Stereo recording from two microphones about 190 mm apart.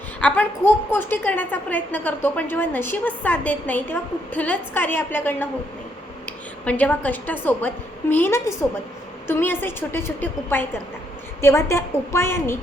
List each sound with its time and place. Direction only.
0.2 s a woman's voice: 5° left (ahead or behind)